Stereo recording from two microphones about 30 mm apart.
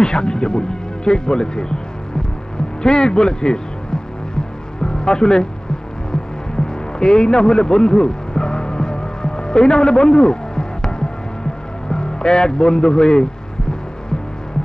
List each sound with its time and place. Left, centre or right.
0.0 s speech: left
2.8 s speech: left
7.0 s music: left
11.9 s speech: left